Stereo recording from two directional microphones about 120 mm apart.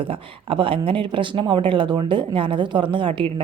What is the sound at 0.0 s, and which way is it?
A woman's voice, 50° right (ahead or behind).